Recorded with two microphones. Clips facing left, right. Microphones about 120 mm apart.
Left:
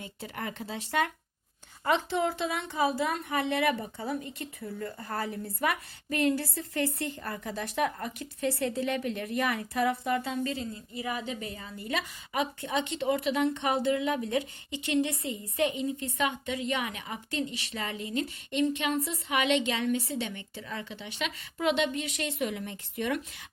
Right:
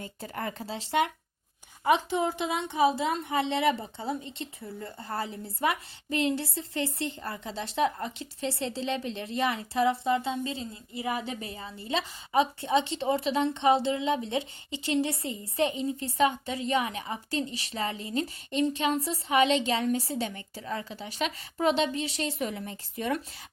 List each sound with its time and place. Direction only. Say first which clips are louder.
0.0 s a woman's voice: right 2 dB; 40° right (ahead or behind)